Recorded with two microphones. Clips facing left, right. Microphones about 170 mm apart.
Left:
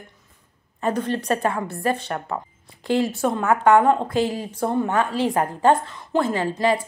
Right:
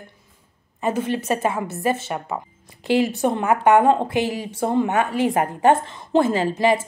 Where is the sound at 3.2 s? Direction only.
15° right (ahead or behind).